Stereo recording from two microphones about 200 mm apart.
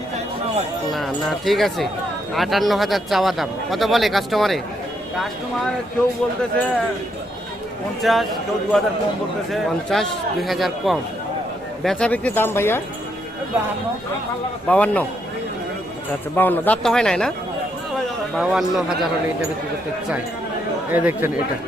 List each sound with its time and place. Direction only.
0.9 s a man's voice: centre (ahead or behind)
8.0 s a man's voice: centre (ahead or behind)
14.7 s speech: 5° left (ahead or behind)
16.3 s a man's voice: 10° left (ahead or behind)
18.3 s a man's voice: centre (ahead or behind)
20.9 s speech: 10° right (ahead or behind)